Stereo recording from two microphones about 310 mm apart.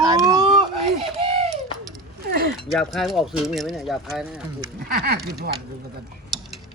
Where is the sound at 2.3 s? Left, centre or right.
Right.